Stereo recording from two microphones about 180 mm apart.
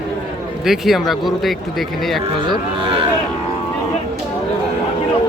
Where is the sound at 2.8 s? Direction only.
30° right (ahead or behind).